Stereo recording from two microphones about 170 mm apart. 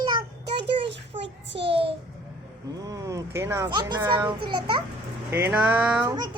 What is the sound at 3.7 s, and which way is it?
Speech, 25° right (ahead or behind).